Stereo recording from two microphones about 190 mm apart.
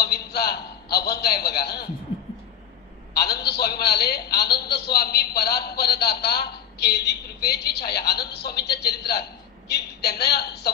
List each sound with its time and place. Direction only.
0.0 s a man's voice: 55° left (ahead or behind)
3.3 s a man's voice: 60° left (ahead or behind)